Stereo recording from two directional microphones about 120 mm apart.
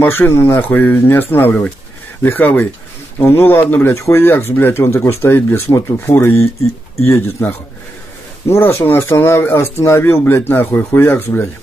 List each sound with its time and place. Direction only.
0.0 s speech: 20° left (ahead or behind)